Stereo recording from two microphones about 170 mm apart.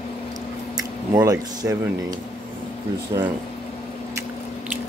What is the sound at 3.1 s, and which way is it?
Speech, 25° right (ahead or behind).